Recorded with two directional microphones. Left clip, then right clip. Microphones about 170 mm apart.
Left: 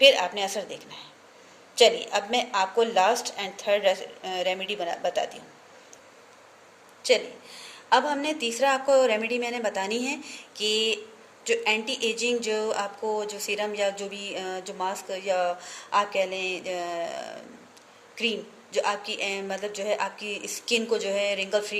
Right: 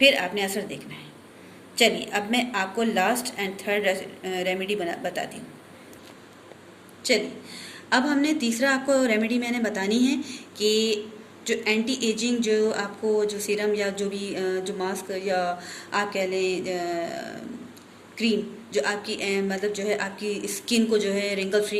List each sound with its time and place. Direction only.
0.0 s speech: 50° left (ahead or behind)
1.8 s speech: 45° left (ahead or behind)
7.0 s a woman's voice: 50° left (ahead or behind)
8.3 s a sound: centre (ahead or behind)
8.5 s speech: 50° left (ahead or behind)
10.2 s a sound: centre (ahead or behind)
11.4 s speech: 50° left (ahead or behind)
20.4 s a sound: centre (ahead or behind)
20.7 s speech: 50° left (ahead or behind)